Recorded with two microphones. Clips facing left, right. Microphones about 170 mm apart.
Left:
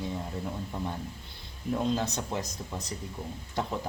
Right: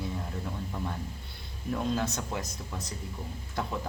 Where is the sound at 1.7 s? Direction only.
20° left (ahead or behind).